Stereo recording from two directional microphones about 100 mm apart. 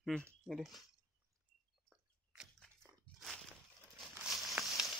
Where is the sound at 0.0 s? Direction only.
5° left (ahead or behind).